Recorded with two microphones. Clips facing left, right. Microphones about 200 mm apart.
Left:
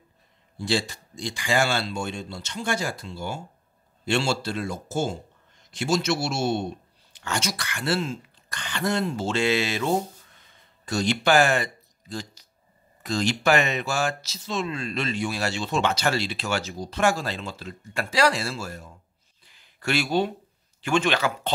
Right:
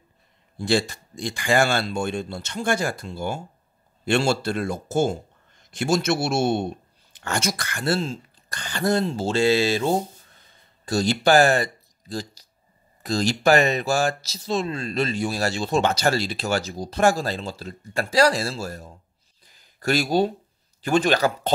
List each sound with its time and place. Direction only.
0.6 s speech: 50° right (ahead or behind)
19.4 s a sound: 40° right (ahead or behind)
20.8 s speech: 40° right (ahead or behind)